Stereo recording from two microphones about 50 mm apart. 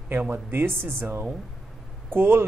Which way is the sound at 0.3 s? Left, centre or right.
Right.